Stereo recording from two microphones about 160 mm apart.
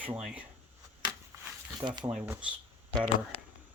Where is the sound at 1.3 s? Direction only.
20° right (ahead or behind).